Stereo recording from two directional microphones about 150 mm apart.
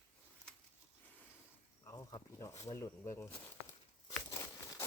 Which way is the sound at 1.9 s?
25° left (ahead or behind).